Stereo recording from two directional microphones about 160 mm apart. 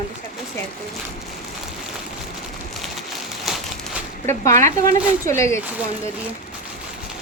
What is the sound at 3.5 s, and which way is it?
Crumpling, centre (ahead or behind).